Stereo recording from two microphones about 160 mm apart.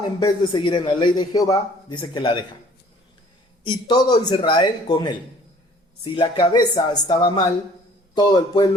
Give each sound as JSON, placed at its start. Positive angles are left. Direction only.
{"t": 0.0, "sound": "a man's voice", "side_deg": 30}
{"t": 3.6, "sound": "a man's voice", "side_deg": 30}